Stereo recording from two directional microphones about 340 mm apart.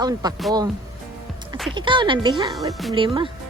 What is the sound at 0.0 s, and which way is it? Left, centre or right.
Speech, centre.